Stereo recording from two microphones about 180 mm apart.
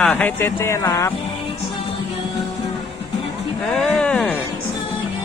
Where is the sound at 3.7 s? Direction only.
5° left (ahead or behind).